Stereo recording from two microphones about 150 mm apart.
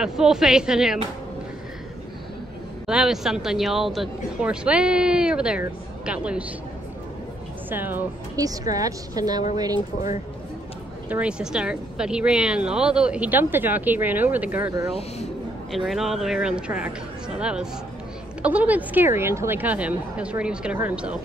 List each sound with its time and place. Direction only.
0.0 s speech: 5° right (ahead or behind)
2.9 s speech: 5° right (ahead or behind)
7.7 s a woman's voice: 15° right (ahead or behind)
11.1 s speech: 10° right (ahead or behind)
15.7 s speech: centre (ahead or behind)